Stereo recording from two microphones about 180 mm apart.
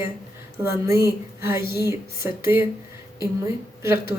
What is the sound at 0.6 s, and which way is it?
A woman's voice, 15° right (ahead or behind).